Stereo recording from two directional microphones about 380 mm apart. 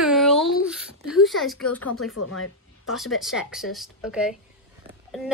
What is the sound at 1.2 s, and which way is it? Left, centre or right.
Speech, centre.